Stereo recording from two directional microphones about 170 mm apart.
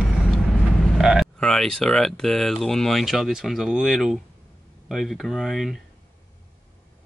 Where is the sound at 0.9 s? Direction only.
Centre (ahead or behind).